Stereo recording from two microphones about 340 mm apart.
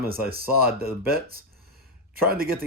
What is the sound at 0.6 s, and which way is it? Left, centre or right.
Speech, right.